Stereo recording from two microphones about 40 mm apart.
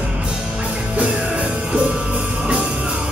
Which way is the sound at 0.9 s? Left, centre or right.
Right.